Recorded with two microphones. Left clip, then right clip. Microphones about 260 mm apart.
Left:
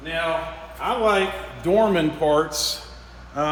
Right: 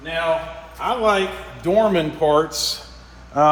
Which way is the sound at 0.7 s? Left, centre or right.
Right.